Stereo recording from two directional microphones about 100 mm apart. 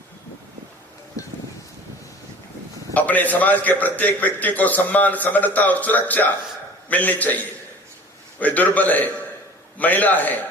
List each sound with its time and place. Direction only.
2.9 s a man's voice: 15° left (ahead or behind)